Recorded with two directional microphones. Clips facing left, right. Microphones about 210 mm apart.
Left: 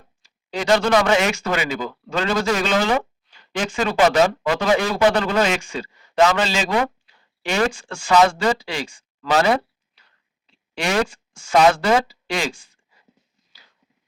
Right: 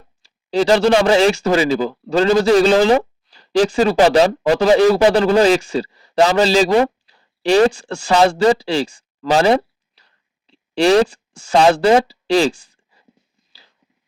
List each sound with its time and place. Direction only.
0.2 s a man's voice: 35° right (ahead or behind)